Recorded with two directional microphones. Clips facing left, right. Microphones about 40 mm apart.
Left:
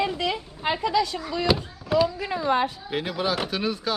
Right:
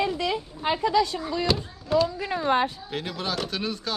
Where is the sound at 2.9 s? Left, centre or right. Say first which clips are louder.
Left 4 dB; centre.